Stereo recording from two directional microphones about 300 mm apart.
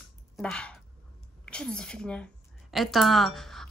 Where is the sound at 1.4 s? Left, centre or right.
Centre.